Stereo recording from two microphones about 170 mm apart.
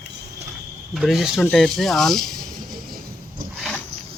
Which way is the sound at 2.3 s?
55° right (ahead or behind).